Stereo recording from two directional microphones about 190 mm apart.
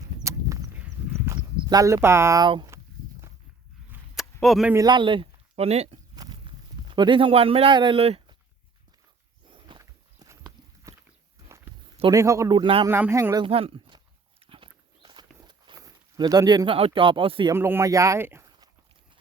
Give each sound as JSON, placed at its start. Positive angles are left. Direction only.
{"t": 0.3, "sound": "horse", "side_deg": -15}
{"t": 1.2, "sound": "a sound", "side_deg": -15}
{"t": 4.1, "sound": "a sound", "side_deg": 0}
{"t": 4.7, "sound": "speech", "side_deg": -20}
{"t": 6.1, "sound": "a sound", "side_deg": -20}
{"t": 6.8, "sound": "speech", "side_deg": -25}
{"t": 9.6, "sound": "walk", "side_deg": -20}
{"t": 12.1, "sound": "a man's voice", "side_deg": -15}
{"t": 12.9, "sound": "a man's voice", "side_deg": -15}
{"t": 13.4, "sound": "walk", "side_deg": -30}
{"t": 17.5, "sound": "speech", "side_deg": -15}